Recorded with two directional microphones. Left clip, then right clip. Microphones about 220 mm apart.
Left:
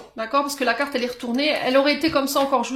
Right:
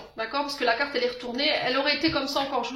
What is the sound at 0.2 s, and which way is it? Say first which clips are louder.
Speech: left 5 dB; 55° left (ahead or behind).